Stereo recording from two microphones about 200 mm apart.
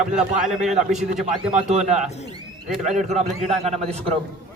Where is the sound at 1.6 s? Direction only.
35° right (ahead or behind).